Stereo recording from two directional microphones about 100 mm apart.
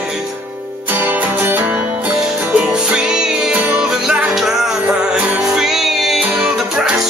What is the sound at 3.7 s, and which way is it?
Music, 15° right (ahead or behind).